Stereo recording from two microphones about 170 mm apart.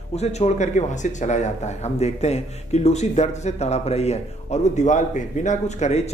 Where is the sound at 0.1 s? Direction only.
40° left (ahead or behind).